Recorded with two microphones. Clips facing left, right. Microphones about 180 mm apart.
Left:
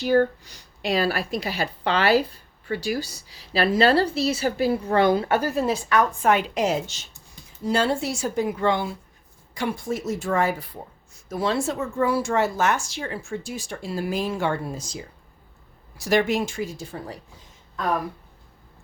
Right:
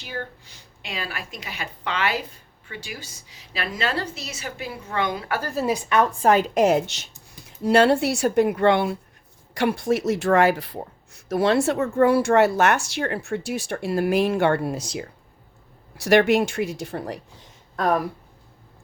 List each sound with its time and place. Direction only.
0.0 s a woman's voice: 40° left (ahead or behind)
5.7 s speech: 20° right (ahead or behind); by 17.2 s 70° right (ahead or behind)